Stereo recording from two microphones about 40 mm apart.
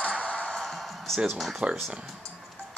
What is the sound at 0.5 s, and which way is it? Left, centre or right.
Music, centre.